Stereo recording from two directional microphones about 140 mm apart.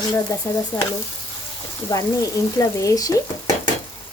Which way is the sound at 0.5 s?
20° left (ahead or behind).